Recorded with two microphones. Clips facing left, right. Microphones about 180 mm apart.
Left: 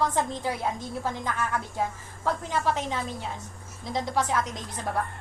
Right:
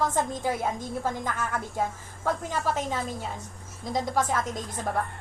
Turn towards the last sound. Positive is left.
turn(degrees=-50)  # may be behind; listen again after turning